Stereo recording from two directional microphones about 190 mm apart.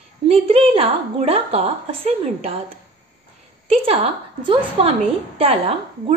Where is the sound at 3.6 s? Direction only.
30° right (ahead or behind).